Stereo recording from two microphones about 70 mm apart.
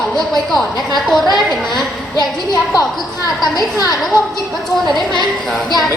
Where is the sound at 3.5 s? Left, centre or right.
Left.